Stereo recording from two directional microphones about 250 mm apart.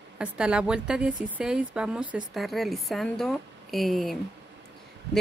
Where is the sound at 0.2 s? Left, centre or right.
Centre.